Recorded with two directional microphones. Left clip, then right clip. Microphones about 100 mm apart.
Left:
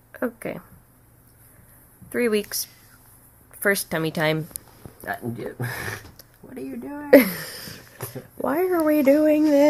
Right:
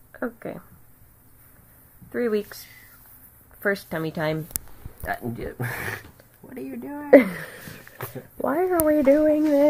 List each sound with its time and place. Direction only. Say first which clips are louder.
0.1 s speech: left 3 dB; 25° left (ahead or behind)
2.0 s speech: left 2 dB; 20° left (ahead or behind)
3.6 s speech: left 3 dB; 20° left (ahead or behind)
5.0 s speech: even; 30° right (ahead or behind)
7.1 s speech: even; centre (ahead or behind); by 9.4 s 20° left (ahead or behind)